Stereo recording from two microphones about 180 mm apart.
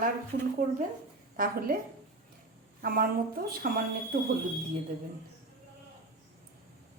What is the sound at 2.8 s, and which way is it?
Speech, 55° right (ahead or behind).